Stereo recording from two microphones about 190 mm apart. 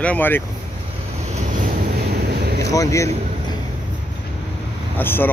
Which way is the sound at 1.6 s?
55° right (ahead or behind).